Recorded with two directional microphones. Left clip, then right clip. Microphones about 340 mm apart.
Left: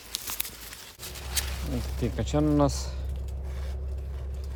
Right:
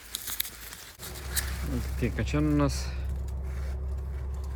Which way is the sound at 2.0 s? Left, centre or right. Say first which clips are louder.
Left 2 dB; centre.